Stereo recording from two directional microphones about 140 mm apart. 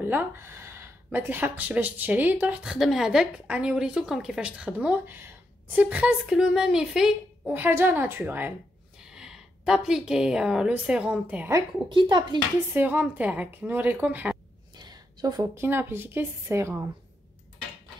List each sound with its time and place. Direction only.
0.0 s a woman's voice: 15° right (ahead or behind)
11.9 s speech: 35° right (ahead or behind)
12.7 s speech: 10° right (ahead or behind)
14.8 s a sound: 30° right (ahead or behind)
15.6 s speech: 15° right (ahead or behind)